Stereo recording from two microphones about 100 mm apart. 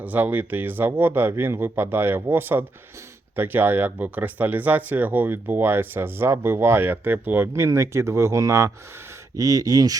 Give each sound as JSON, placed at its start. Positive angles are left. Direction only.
{"t": 0.0, "sound": "speech", "side_deg": -15}